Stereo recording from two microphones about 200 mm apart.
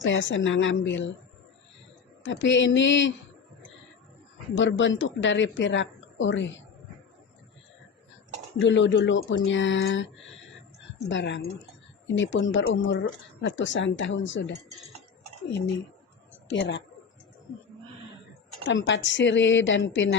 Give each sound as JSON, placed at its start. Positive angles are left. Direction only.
{"t": 0.0, "sound": "a woman's voice", "side_deg": 70}
{"t": 2.2, "sound": "a woman's voice", "side_deg": 65}
{"t": 4.5, "sound": "a woman's voice", "side_deg": 70}
{"t": 8.5, "sound": "a woman's voice", "side_deg": 70}
{"t": 15.4, "sound": "a woman's voice", "side_deg": 65}
{"t": 18.7, "sound": "a woman's voice", "side_deg": 65}